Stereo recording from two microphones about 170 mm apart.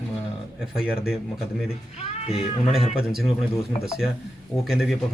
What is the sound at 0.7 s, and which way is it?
Speech, 5° right (ahead or behind).